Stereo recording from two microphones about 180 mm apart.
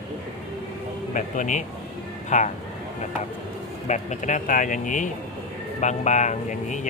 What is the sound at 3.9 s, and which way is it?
Speech, 40° left (ahead or behind).